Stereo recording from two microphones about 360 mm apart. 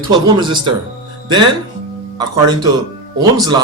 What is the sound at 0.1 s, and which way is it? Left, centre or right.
Speech, centre.